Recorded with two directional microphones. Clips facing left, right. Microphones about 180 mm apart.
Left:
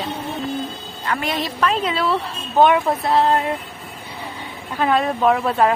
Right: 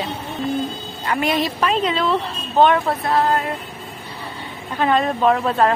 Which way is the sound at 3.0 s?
25° left (ahead or behind).